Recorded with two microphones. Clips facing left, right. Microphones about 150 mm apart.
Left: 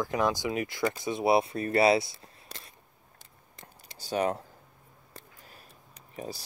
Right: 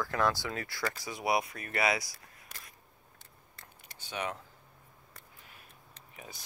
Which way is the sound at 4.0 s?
40° left (ahead or behind).